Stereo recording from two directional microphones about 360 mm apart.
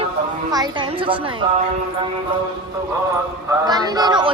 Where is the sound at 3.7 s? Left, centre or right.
Centre.